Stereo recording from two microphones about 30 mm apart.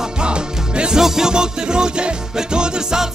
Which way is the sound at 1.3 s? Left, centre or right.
Right.